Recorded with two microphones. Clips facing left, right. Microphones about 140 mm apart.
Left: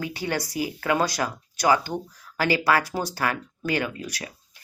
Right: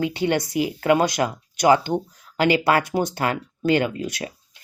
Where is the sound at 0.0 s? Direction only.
25° right (ahead or behind).